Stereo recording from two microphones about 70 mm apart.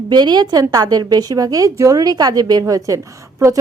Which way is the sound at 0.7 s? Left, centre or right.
Right.